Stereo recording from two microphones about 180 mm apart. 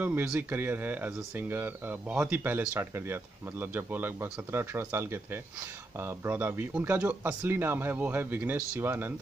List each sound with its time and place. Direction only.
0.0 s speech: 10° right (ahead or behind)